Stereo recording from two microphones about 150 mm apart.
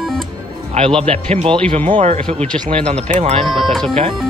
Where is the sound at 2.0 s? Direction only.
45° right (ahead or behind).